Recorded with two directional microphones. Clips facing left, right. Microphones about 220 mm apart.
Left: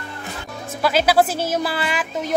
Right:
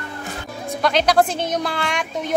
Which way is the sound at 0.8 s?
5° left (ahead or behind).